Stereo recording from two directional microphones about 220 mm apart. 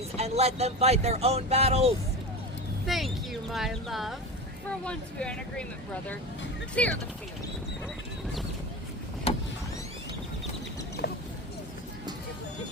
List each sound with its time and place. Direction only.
0.2 s speech: 30° right (ahead or behind)
2.8 s speech: centre (ahead or behind)
6.8 s speech: 5° left (ahead or behind)
9.3 s vehicle: 25° left (ahead or behind)
11.0 s a sound: 50° left (ahead or behind)